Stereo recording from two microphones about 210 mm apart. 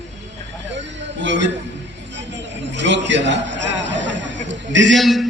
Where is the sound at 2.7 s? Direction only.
60° right (ahead or behind).